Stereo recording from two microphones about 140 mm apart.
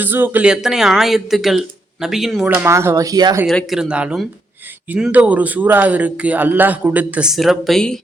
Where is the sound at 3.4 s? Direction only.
Centre (ahead or behind).